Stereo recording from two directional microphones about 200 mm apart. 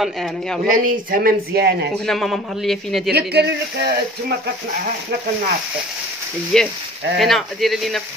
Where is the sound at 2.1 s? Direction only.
Centre (ahead or behind).